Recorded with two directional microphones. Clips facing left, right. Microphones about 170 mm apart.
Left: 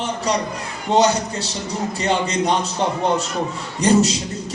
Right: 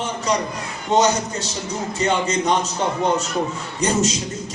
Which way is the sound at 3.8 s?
35° left (ahead or behind).